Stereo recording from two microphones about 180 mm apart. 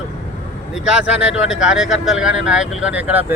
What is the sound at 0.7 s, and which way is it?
Speech, 5° right (ahead or behind).